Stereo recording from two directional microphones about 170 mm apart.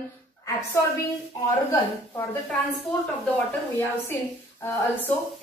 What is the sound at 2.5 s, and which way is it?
A woman's voice, 5° left (ahead or behind).